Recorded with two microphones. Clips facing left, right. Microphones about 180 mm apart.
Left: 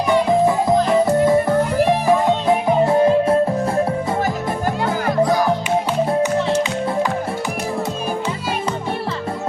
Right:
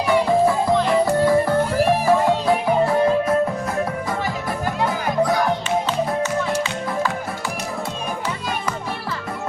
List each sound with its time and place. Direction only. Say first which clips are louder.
1.0 s music: left 2 dB; 20° left (ahead or behind)